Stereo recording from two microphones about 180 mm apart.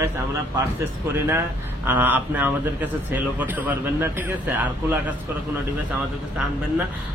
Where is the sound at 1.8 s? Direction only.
10° right (ahead or behind).